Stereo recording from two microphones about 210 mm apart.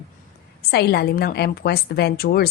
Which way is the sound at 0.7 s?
50° left (ahead or behind).